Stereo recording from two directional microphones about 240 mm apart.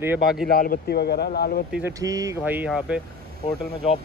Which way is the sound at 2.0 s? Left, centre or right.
Centre.